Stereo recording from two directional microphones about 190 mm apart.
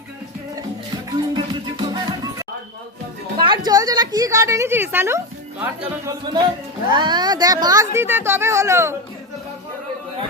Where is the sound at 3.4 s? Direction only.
25° right (ahead or behind).